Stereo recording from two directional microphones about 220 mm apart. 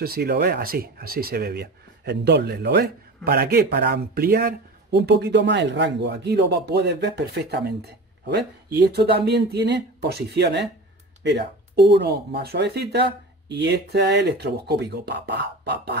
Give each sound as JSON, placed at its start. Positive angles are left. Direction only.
{"t": 0.0, "sound": "speech", "side_deg": -45}